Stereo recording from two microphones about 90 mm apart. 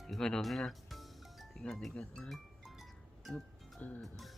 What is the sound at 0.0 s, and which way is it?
Music, 5° left (ahead or behind).